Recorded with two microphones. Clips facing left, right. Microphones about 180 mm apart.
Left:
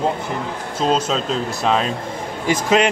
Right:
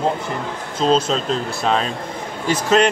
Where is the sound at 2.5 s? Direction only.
10° left (ahead or behind).